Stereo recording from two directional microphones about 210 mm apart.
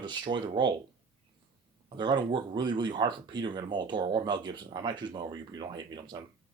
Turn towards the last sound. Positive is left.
turn(degrees=-20)  # may be behind; listen again after turning